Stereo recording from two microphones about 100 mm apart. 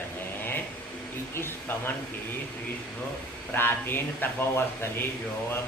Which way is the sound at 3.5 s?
20° left (ahead or behind).